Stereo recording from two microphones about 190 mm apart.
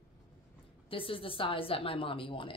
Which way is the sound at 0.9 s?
30° left (ahead or behind).